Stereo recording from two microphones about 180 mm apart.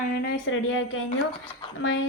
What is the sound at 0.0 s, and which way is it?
A woman's voice, 65° left (ahead or behind).